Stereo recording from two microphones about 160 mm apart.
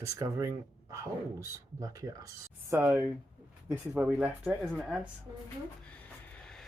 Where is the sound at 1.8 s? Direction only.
20° right (ahead or behind); by 4.9 s centre (ahead or behind).